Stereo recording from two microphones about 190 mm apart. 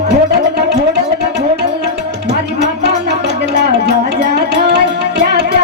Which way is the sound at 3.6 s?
60° right (ahead or behind).